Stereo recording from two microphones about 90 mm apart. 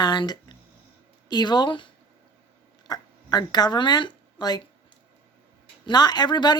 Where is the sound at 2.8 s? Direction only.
45° left (ahead or behind).